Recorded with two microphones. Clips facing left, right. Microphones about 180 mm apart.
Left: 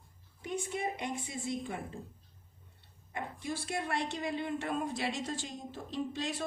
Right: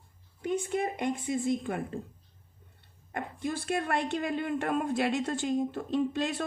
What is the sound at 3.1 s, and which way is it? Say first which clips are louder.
A woman's voice: right 4 dB; 55° right (ahead or behind).